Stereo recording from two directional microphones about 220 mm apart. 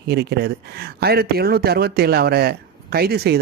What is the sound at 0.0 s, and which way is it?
A man's voice, 50° right (ahead or behind).